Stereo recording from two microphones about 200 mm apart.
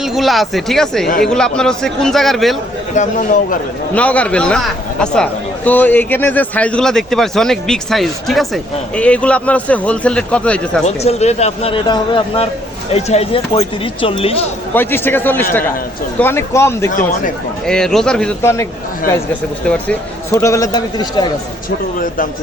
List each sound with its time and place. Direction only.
0.0 s a man's voice: centre (ahead or behind)
2.9 s a man's voice: 40° left (ahead or behind)
3.9 s a man's voice: 5° left (ahead or behind)
10.8 s a man's voice: 30° left (ahead or behind)
14.7 s speech: 10° left (ahead or behind)
17.7 s a man's voice: centre (ahead or behind); by 21.3 s 20° left (ahead or behind)